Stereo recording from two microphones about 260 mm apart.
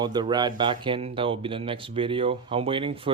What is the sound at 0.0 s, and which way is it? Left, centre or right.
Speech, centre.